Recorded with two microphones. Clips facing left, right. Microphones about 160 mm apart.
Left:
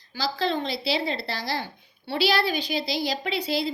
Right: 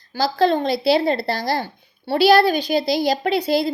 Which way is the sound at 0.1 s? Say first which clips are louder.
Right 9 dB; 50° right (ahead or behind).